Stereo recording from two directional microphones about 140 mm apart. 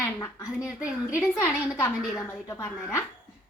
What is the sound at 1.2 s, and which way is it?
A woman's voice, 20° left (ahead or behind).